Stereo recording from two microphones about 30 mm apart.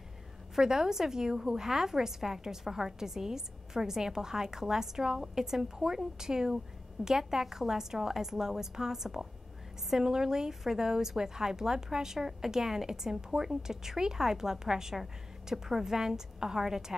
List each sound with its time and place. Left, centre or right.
0.6 s speech: centre